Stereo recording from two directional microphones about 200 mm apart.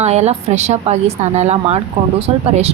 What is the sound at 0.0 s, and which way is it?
A woman's voice, 35° right (ahead or behind).